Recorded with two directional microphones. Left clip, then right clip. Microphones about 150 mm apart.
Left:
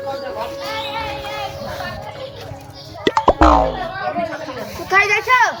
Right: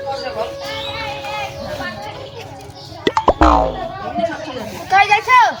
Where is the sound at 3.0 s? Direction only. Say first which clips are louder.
Even; centre (ahead or behind).